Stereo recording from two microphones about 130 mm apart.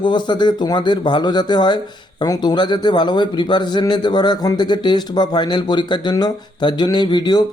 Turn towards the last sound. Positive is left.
turn(degrees=35)  # may be behind; listen again after turning